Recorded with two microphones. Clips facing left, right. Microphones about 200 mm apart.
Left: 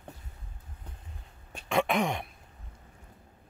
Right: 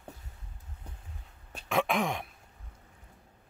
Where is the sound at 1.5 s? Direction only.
Centre (ahead or behind).